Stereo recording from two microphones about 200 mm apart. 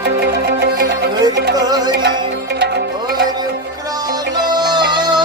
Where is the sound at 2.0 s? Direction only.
55° right (ahead or behind).